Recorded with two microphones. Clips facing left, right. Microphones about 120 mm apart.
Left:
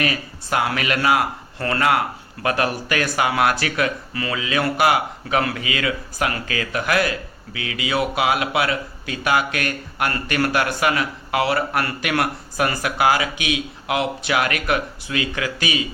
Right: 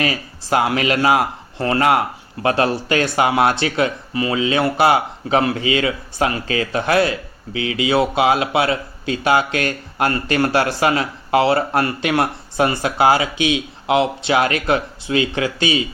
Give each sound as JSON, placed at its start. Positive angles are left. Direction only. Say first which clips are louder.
{"t": 0.0, "sound": "a man's voice", "louder": "right 2 dB", "side_deg": -25}